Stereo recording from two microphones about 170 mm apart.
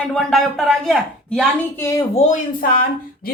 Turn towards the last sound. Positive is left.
turn(degrees=55)  # may be behind; listen again after turning